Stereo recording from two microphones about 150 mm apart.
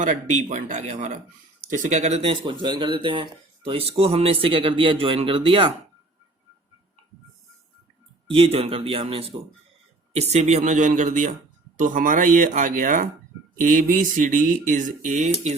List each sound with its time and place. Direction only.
0.0 s speech: 55° right (ahead or behind)
2.5 s speech: 35° right (ahead or behind)
8.3 s speech: 40° right (ahead or behind)